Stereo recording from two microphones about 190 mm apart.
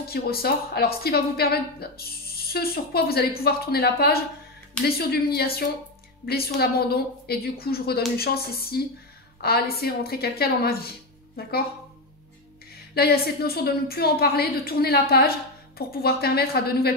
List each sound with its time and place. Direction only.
0.1 s a woman's voice: 55° left (ahead or behind)
12.9 s a woman's voice: 55° left (ahead or behind)